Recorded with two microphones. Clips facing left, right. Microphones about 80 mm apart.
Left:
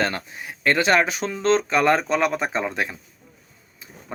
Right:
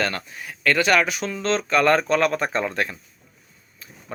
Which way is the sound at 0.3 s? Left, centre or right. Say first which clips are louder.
Even; left.